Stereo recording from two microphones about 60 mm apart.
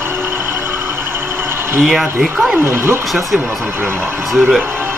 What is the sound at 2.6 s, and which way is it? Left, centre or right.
Speech, right.